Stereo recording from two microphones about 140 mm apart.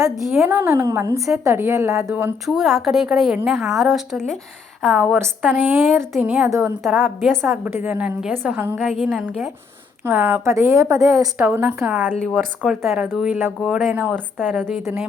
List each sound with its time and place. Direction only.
0.3 s a woman's voice: 15° right (ahead or behind)
2.5 s a woman's voice: centre (ahead or behind)
5.6 s a woman's voice: 15° right (ahead or behind)
7.2 s a woman's voice: centre (ahead or behind)
7.5 s a woman's voice: 15° right (ahead or behind)
8.8 s a woman's voice: centre (ahead or behind)
10.0 s speech: 15° right (ahead or behind)
11.3 s a woman's voice: 10° right (ahead or behind)
12.1 s a woman's voice: 5° left (ahead or behind)
12.8 s a woman's voice: 15° right (ahead or behind)
14.3 s a woman's voice: 5° left (ahead or behind)